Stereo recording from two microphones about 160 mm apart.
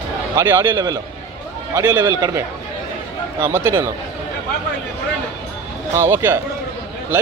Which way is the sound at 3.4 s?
15° right (ahead or behind).